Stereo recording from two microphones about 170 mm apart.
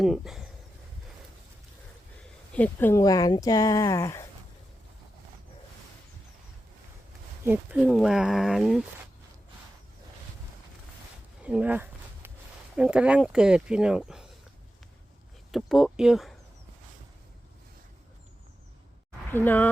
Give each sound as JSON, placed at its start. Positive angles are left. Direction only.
{"t": 0.0, "sound": "speech", "side_deg": 0}
{"t": 2.5, "sound": "speech", "side_deg": 10}
{"t": 7.4, "sound": "speech", "side_deg": -10}
{"t": 11.4, "sound": "a sound", "side_deg": -10}
{"t": 12.7, "sound": "speech", "side_deg": -5}
{"t": 15.5, "sound": "speech", "side_deg": 0}
{"t": 19.3, "sound": "speech", "side_deg": 10}